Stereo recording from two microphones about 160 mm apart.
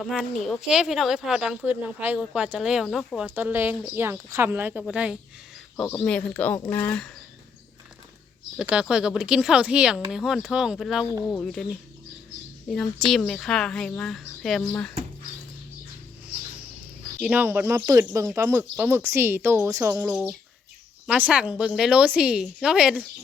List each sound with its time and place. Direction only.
0.0 s speech: centre (ahead or behind)
3.2 s a woman's voice: 10° right (ahead or behind)
5.7 s speech: 15° left (ahead or behind)
8.6 s speech: 5° right (ahead or behind)
17.2 s a woman's voice: 10° right (ahead or behind)